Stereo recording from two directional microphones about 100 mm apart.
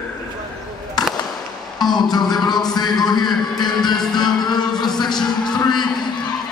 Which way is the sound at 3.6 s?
45° left (ahead or behind).